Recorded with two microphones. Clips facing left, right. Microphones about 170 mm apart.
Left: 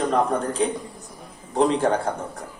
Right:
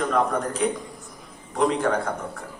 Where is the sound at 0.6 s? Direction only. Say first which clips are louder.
Left 1 dB; 30° left (ahead or behind).